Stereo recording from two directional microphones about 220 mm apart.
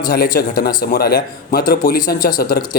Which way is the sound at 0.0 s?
40° left (ahead or behind).